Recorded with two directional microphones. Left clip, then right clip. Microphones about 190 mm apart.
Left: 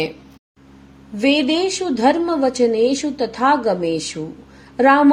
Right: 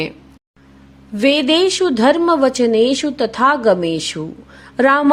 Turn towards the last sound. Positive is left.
turn(degrees=-45)  # may be behind; listen again after turning